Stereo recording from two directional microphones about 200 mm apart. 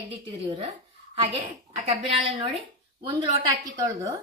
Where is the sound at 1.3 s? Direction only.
30° right (ahead or behind).